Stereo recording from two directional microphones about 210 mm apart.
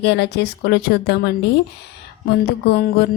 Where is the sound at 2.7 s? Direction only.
55° left (ahead or behind).